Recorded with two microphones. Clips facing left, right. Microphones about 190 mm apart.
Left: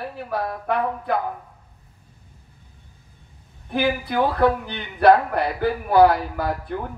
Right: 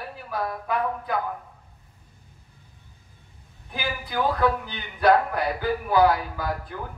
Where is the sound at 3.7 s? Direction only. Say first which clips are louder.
Left 10 dB; 60° left (ahead or behind).